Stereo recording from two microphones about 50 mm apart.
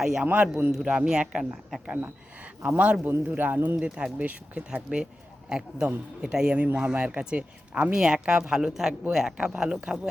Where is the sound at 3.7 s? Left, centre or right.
Centre.